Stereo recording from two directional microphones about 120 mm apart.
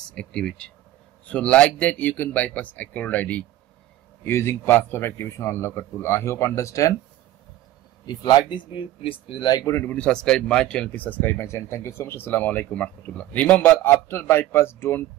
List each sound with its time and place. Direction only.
0.1 s a man's voice: 10° left (ahead or behind); by 7.0 s 25° left (ahead or behind)
8.1 s speech: 35° left (ahead or behind)
9.0 s speech: 45° left (ahead or behind)
9.8 s a man's voice: 10° left (ahead or behind)